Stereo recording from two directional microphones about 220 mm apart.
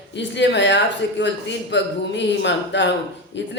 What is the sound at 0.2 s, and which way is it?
A man's voice, 55° left (ahead or behind).